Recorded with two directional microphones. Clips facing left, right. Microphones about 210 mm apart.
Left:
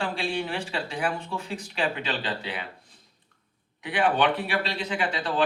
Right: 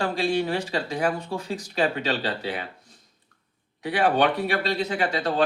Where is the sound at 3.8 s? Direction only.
40° right (ahead or behind).